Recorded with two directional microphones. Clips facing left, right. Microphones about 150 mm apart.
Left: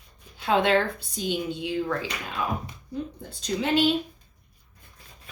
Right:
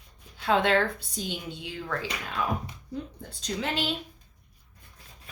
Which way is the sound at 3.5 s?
15° left (ahead or behind).